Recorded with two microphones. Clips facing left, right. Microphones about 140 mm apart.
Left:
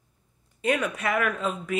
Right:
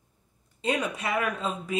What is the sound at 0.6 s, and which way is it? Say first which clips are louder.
Speech: left 3 dB; 25° right (ahead or behind).